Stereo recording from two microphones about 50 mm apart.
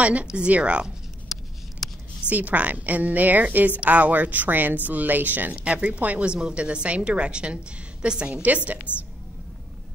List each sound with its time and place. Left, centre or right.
0.0 s a woman's voice: right
1.3 s a sound: centre
2.2 s a woman's voice: right
5.6 s a woman's voice: right